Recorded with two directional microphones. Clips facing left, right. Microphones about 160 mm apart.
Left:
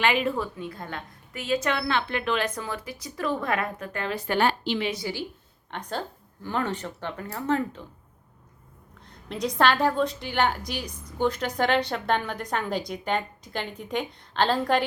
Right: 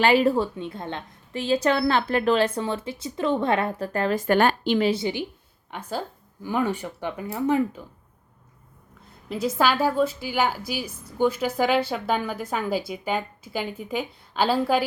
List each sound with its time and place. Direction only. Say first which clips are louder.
0.0 s a woman's voice: right 6 dB; 35° right (ahead or behind)
4.9 s a woman's voice: right 6 dB; 25° right (ahead or behind)
5.7 s speech: right 1 dB; 5° right (ahead or behind)
9.0 s a woman's voice: right 2 dB; 5° right (ahead or behind)